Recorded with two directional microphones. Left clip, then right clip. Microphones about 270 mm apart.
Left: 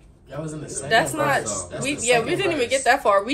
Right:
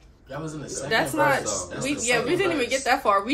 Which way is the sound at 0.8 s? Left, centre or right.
Centre.